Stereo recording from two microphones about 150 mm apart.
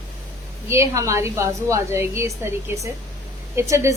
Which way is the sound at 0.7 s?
20° right (ahead or behind).